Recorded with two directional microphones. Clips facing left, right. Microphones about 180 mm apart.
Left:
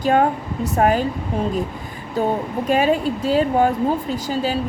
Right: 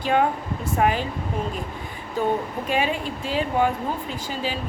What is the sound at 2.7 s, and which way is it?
Speech, 40° left (ahead or behind).